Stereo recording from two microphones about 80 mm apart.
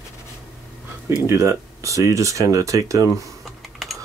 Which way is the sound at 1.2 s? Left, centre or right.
Right.